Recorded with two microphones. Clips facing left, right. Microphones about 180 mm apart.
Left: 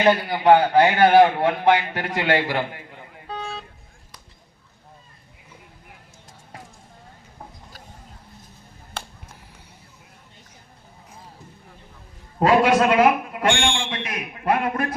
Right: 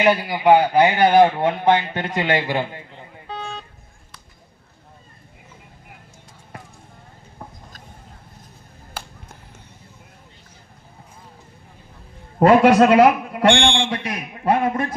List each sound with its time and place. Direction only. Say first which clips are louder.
0.0 s speech: right 1 dB; 10° right (ahead or behind)
12.4 s a man's voice: right 5 dB; 45° right (ahead or behind)
13.6 s a man's voice: right 5 dB; 45° left (ahead or behind)
13.9 s a man's voice: right 3 dB; 35° right (ahead or behind)